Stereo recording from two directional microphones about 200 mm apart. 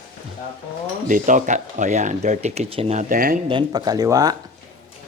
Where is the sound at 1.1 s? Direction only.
40° right (ahead or behind).